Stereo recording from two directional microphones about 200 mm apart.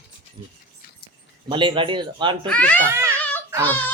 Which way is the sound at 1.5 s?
25° right (ahead or behind).